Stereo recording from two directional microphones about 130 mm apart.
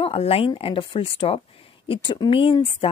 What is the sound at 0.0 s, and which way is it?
A woman's voice, 50° left (ahead or behind).